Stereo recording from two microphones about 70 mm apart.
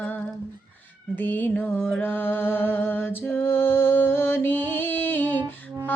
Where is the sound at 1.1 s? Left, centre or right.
Left.